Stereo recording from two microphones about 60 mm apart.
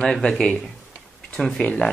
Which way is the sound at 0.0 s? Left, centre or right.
Centre.